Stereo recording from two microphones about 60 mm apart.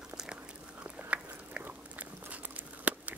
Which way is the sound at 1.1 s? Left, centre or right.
Right.